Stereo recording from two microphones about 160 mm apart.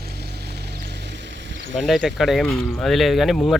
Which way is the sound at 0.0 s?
85° right.